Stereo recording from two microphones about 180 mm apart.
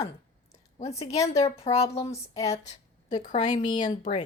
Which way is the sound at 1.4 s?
35° left (ahead or behind).